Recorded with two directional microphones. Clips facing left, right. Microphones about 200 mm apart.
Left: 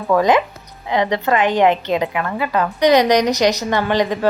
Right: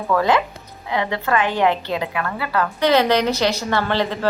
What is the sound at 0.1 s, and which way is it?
A woman's voice, 20° left (ahead or behind).